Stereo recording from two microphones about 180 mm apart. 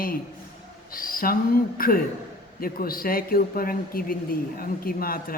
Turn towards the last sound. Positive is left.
turn(degrees=55)  # may be behind; listen again after turning